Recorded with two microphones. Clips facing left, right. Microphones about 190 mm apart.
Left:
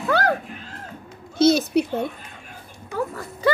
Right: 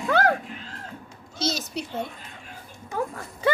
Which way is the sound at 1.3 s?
60° left (ahead or behind).